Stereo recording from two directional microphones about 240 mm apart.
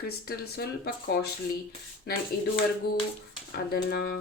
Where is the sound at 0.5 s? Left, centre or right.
Left.